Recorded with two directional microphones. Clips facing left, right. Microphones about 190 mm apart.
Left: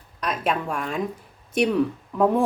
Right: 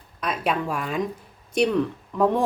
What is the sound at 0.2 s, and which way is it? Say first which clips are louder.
Speech: even; centre (ahead or behind).